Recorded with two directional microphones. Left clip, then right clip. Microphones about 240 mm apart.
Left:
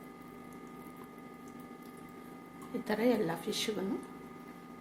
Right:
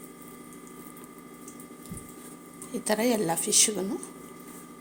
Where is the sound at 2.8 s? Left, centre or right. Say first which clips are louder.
Right 5 dB; right.